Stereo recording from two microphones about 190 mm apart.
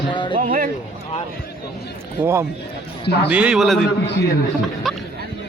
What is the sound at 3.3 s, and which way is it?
Speech, 5° right (ahead or behind).